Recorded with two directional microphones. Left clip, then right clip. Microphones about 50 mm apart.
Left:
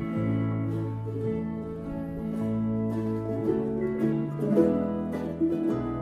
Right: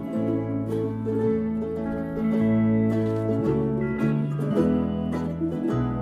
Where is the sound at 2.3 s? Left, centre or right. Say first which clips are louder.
Right 8 dB; right.